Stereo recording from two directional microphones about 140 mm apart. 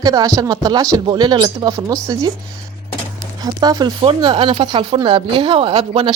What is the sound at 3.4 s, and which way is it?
Speech, 30° right (ahead or behind).